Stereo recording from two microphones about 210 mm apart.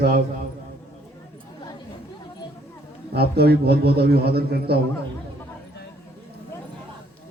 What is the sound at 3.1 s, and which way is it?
A man's voice, 50° right (ahead or behind).